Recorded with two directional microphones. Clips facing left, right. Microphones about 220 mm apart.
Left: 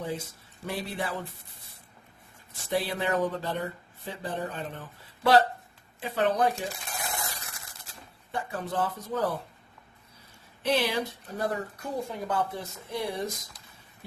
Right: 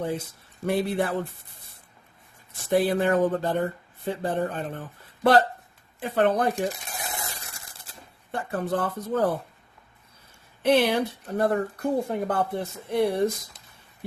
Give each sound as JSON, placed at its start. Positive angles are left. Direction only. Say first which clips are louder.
{"t": 0.6, "sound": "speech", "louder": "right 9 dB", "side_deg": -60}
{"t": 2.6, "sound": "speech", "louder": "right 7 dB", "side_deg": -50}
{"t": 7.0, "sound": "a sound", "louder": "even", "side_deg": -25}
{"t": 8.3, "sound": "speech", "louder": "right 6 dB", "side_deg": -55}
{"t": 10.6, "sound": "speech", "louder": "right 6 dB", "side_deg": -55}